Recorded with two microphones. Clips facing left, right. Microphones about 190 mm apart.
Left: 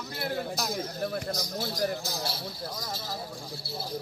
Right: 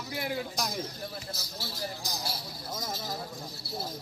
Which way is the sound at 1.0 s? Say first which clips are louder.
Left 9 dB; 60° left (ahead or behind).